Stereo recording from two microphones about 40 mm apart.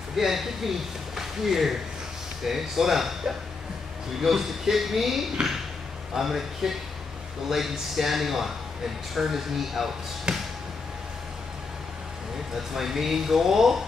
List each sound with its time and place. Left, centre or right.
0.1 s speech: centre
10.3 s a sound: centre
12.5 s speech: centre